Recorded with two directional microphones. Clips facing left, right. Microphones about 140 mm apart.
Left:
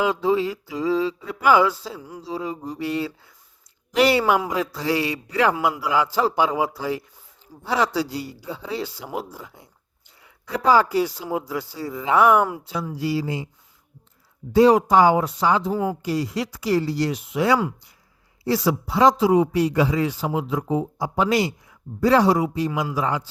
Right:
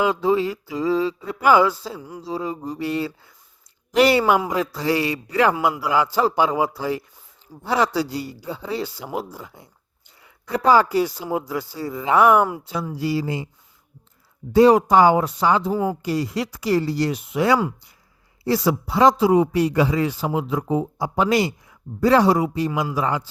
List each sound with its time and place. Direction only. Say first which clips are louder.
0.0 s a man's voice: right 1 dB; 50° right (ahead or behind)
2.2 s mantra: right 2 dB; 40° right (ahead or behind)
3.9 s a man's voice: right 2 dB; 50° right (ahead or behind)
10.6 s a man's voice: right 1 dB; 50° right (ahead or behind)
14.5 s a man's voice: right 1 dB; 55° right (ahead or behind)